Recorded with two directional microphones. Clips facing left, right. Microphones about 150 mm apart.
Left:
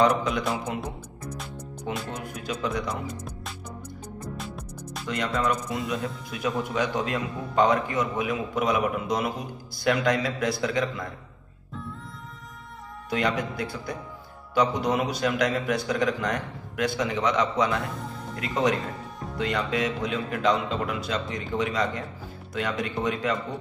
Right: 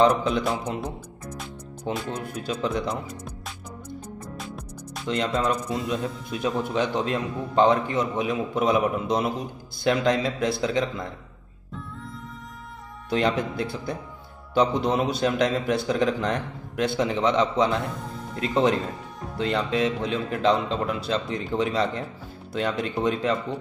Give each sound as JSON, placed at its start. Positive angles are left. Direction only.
{"t": 0.0, "sound": "a man's voice", "side_deg": -30}
{"t": 1.9, "sound": "a man's voice", "side_deg": -30}
{"t": 3.1, "sound": "music", "side_deg": 0}
{"t": 5.0, "sound": "a man's voice", "side_deg": -25}
{"t": 13.1, "sound": "a man's voice", "side_deg": -30}